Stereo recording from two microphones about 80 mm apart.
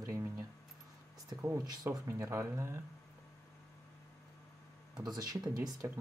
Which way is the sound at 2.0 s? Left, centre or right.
Right.